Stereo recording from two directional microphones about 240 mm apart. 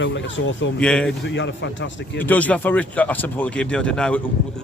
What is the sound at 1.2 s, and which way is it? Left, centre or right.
Speech, left.